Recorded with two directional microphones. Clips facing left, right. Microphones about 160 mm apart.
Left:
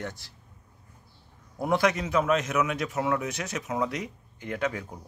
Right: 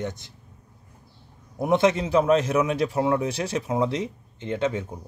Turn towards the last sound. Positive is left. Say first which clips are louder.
# right 5 dB
turn(degrees=-25)  # may be behind; listen again after turning